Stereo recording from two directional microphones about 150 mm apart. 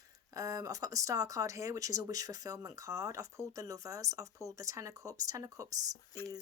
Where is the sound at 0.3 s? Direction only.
25° right (ahead or behind).